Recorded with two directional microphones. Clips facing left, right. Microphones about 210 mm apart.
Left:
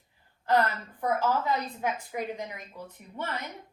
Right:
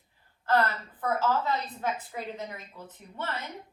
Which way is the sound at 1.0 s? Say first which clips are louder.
Left 1 dB; 15° left (ahead or behind).